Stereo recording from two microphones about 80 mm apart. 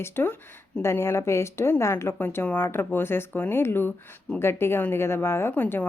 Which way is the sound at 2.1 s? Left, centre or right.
Left.